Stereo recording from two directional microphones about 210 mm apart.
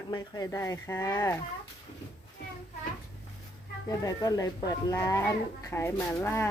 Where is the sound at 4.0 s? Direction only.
15° left (ahead or behind).